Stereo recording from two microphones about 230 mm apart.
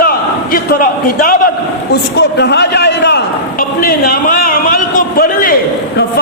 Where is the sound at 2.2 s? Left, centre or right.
Left.